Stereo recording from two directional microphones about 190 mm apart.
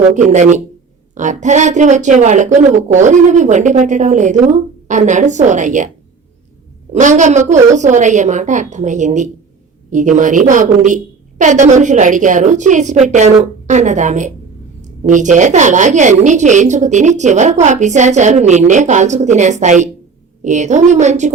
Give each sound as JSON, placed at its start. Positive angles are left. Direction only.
{"t": 1.1, "sound": "a woman's voice", "side_deg": -40}
{"t": 6.9, "sound": "a woman's voice", "side_deg": -40}